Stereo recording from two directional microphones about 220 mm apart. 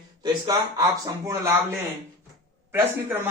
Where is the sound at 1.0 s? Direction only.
15° right (ahead or behind).